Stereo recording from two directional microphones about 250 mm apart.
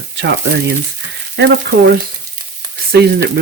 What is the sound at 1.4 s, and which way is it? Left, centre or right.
Speech, right.